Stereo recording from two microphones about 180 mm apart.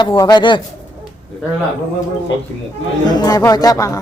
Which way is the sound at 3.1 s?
20° left (ahead or behind).